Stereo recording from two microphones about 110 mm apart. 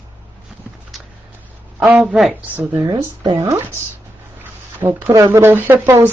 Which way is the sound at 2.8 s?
45° right (ahead or behind).